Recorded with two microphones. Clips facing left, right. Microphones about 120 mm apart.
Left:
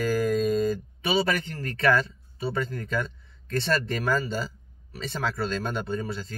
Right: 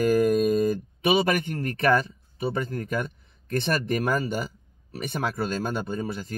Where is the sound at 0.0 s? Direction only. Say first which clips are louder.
Right 4 dB; 20° right (ahead or behind).